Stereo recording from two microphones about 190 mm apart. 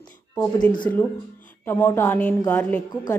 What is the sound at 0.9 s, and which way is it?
A woman's voice, 10° left (ahead or behind).